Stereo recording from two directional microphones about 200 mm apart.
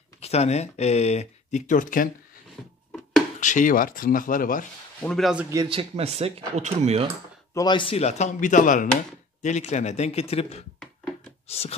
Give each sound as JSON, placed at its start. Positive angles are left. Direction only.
{"t": 0.2, "sound": "speech", "side_deg": 30}
{"t": 3.3, "sound": "speech", "side_deg": 40}
{"t": 5.0, "sound": "speech", "side_deg": 0}
{"t": 5.5, "sound": "speech", "side_deg": -20}
{"t": 7.5, "sound": "speech", "side_deg": 20}
{"t": 11.4, "sound": "a sound", "side_deg": 30}